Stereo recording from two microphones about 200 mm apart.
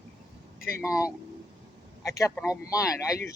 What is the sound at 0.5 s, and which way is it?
Speech, 45° left (ahead or behind).